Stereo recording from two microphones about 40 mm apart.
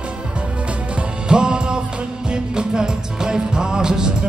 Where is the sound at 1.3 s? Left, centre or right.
Right.